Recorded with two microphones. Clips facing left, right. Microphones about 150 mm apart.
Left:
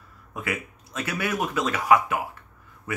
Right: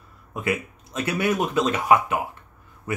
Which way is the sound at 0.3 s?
25° right (ahead or behind).